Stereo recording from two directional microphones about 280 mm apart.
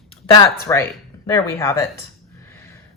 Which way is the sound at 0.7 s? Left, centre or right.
Centre.